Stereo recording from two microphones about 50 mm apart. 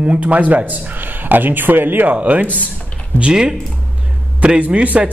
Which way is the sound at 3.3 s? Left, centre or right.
Centre.